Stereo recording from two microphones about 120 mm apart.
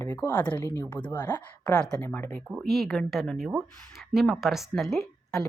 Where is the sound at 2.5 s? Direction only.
Centre (ahead or behind).